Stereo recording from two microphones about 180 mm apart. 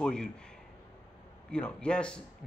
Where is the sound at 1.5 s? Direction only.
5° left (ahead or behind).